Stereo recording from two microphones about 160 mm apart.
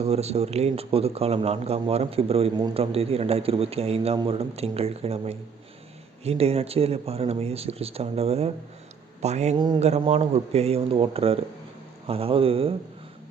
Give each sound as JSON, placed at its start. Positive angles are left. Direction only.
{"t": 0.0, "sound": "a man's voice", "side_deg": -40}
{"t": 9.6, "sound": "speech", "side_deg": -30}
{"t": 10.1, "sound": "a man's voice", "side_deg": -40}